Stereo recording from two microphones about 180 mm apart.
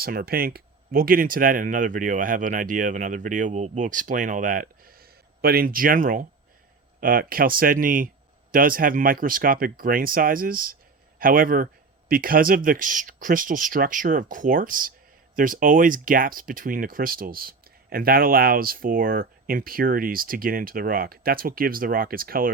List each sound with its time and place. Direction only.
0.0 s speech: 55° right (ahead or behind)